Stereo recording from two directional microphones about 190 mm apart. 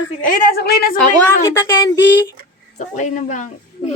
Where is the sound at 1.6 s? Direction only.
15° left (ahead or behind).